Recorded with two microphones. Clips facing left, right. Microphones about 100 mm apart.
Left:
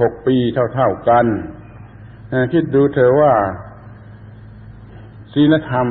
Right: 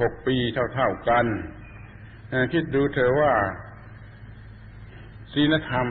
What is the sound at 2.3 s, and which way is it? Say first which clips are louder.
A man's voice: left 9 dB; 35° left (ahead or behind).